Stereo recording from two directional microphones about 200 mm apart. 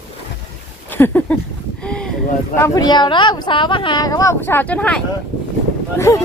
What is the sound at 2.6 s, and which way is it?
Speech, 20° left (ahead or behind).